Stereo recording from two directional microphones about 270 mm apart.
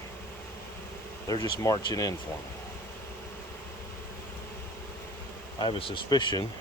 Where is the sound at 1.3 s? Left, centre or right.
Centre.